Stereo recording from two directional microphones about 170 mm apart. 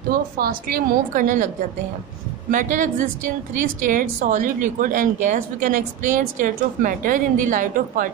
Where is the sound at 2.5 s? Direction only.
50° right (ahead or behind).